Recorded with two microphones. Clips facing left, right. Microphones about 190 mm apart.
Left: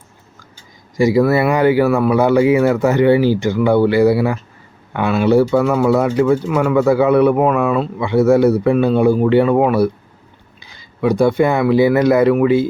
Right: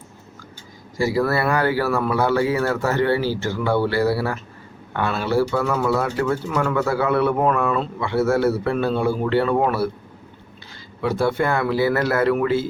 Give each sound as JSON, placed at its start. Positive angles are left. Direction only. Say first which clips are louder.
{"t": 0.9, "sound": "speech", "louder": "left 7 dB", "side_deg": 20}